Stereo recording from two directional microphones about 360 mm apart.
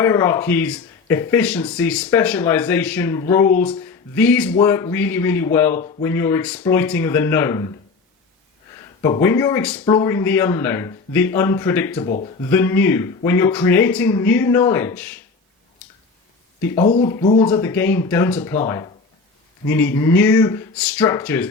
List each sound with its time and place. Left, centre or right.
0.0 s speech: centre
9.0 s speech: centre
16.6 s speech: centre